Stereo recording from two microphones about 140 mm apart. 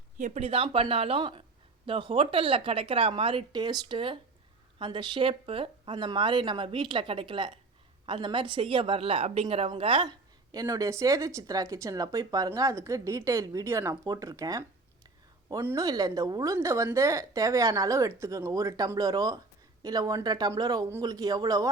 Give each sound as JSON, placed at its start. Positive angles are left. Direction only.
{"t": 0.2, "sound": "a woman's voice", "side_deg": -55}
{"t": 15.6, "sound": "a woman's voice", "side_deg": -25}